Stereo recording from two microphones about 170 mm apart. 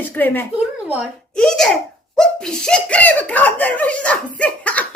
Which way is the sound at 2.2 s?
5° left (ahead or behind).